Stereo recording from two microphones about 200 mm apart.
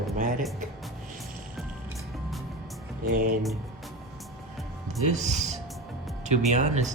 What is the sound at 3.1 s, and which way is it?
Speech, 45° right (ahead or behind).